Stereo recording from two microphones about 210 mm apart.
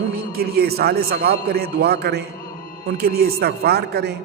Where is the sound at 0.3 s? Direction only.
45° right (ahead or behind).